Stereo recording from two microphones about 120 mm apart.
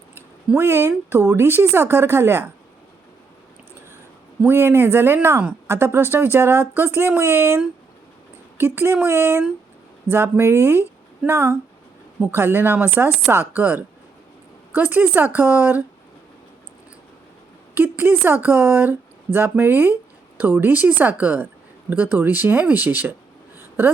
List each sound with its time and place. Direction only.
0.5 s speech: 20° right (ahead or behind)
4.4 s speech: 20° right (ahead or behind)
17.7 s speech: 15° right (ahead or behind)
23.6 s a sound: 15° right (ahead or behind)